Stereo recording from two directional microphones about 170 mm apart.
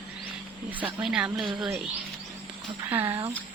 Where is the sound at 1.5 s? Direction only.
25° right (ahead or behind).